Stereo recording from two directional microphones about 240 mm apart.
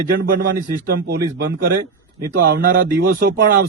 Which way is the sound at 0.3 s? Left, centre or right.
Right.